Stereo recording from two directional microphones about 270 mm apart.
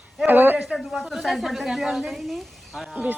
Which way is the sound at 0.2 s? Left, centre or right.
Centre.